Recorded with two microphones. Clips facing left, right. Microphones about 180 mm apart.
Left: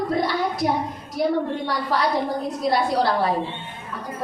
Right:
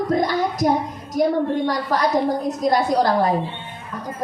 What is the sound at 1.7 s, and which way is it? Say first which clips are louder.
Speech: right 3 dB; 45° right (ahead or behind).